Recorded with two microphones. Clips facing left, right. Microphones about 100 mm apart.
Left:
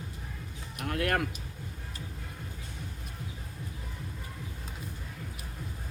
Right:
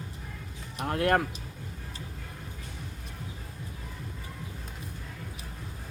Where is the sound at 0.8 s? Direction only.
30° right (ahead or behind).